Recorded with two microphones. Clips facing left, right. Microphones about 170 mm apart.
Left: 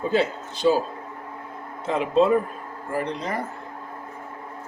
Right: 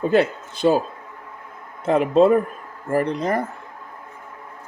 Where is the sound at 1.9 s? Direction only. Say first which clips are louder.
Right 4 dB; 50° right (ahead or behind).